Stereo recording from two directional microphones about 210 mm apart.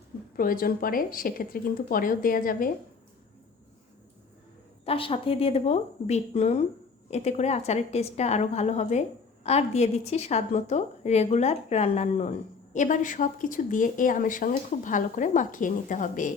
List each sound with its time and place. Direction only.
0.3 s speech: 45° left (ahead or behind)
4.9 s a woman's voice: 25° left (ahead or behind)